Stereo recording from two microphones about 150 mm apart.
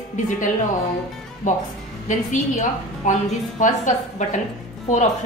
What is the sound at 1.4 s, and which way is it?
A woman's voice, 55° left (ahead or behind).